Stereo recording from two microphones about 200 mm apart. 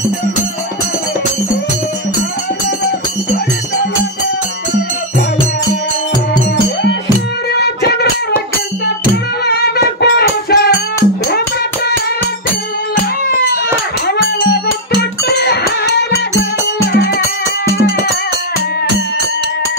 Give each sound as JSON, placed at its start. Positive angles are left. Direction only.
{"t": 7.6, "sound": "a sound", "side_deg": 55}
{"t": 9.1, "sound": "music", "side_deg": 55}
{"t": 14.4, "sound": "music", "side_deg": 50}